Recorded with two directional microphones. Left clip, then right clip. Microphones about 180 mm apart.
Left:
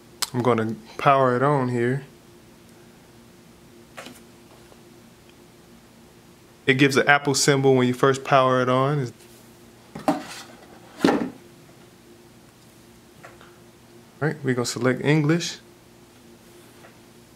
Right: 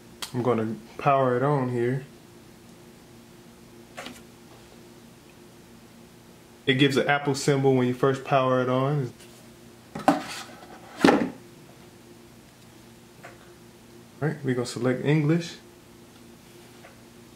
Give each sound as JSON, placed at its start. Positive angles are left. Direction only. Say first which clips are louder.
{"t": 0.2, "sound": "speech", "louder": "left 4 dB", "side_deg": 35}
{"t": 6.6, "sound": "speech", "louder": "left 4 dB", "side_deg": 25}
{"t": 9.9, "sound": "dishes", "louder": "right 2 dB", "side_deg": 0}
{"t": 11.0, "sound": "a sound", "louder": "right 1 dB", "side_deg": 0}
{"t": 14.2, "sound": "speech", "louder": "left 4 dB", "side_deg": 30}